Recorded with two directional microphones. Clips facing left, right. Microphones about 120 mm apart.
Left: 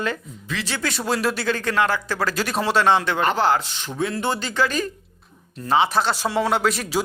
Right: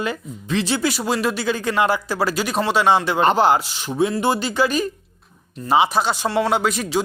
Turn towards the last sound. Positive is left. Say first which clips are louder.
# right 1 dB
turn(degrees=0)  # may be behind; listen again after turning